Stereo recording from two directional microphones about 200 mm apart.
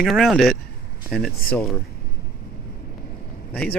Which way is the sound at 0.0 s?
Centre (ahead or behind).